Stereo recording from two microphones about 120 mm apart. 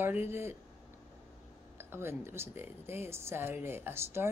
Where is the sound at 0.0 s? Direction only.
20° right (ahead or behind).